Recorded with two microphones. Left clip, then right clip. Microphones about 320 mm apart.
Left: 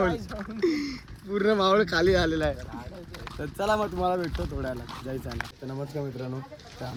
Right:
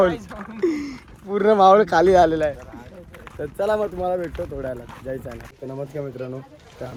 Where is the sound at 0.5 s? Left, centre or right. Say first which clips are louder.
Right 4 dB; centre.